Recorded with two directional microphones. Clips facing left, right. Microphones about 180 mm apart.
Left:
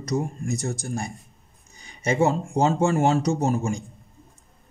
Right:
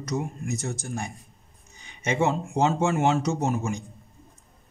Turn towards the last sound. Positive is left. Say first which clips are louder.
# left 3 dB
turn(degrees=35)  # may be behind; listen again after turning